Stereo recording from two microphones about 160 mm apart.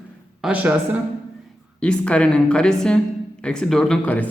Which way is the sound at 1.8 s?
5° left (ahead or behind).